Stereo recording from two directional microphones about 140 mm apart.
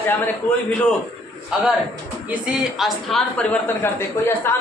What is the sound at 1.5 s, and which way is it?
A man's voice, 5° right (ahead or behind).